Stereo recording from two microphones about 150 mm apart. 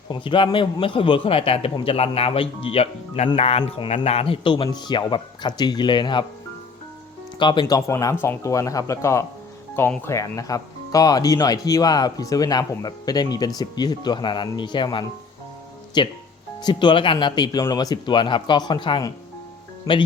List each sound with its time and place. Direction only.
0.1 s a man's voice: 30° left (ahead or behind)
7.3 s a man's voice: 30° left (ahead or behind)